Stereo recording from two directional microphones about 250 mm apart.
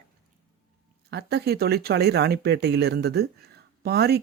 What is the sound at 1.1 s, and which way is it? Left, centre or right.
Speech, right.